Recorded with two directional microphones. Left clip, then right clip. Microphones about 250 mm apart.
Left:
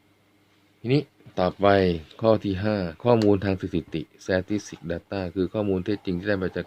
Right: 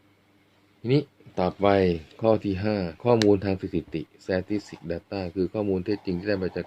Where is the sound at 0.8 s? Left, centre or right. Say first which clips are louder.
Even; centre.